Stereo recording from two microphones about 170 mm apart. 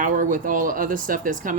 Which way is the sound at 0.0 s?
50° right (ahead or behind).